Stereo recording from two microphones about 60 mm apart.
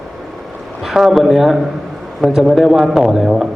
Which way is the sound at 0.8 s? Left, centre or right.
Centre.